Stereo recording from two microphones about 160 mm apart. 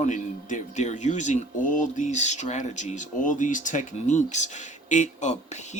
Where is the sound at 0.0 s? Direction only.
50° left (ahead or behind).